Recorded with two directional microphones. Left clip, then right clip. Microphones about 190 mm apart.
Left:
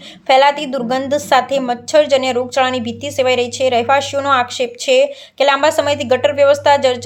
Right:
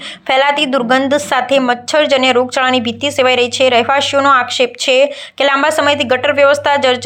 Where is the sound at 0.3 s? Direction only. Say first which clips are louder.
Even; 5° right (ahead or behind).